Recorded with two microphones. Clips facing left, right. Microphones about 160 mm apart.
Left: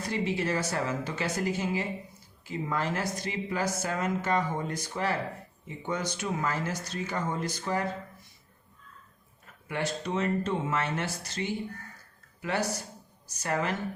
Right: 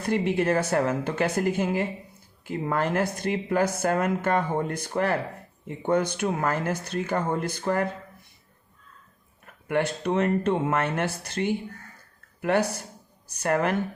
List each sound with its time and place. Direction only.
0.0 s speech: 55° right (ahead or behind)
9.6 s speech: 60° right (ahead or behind)